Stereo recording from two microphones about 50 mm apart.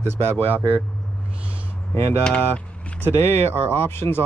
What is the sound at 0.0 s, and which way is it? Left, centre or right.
Speech, right.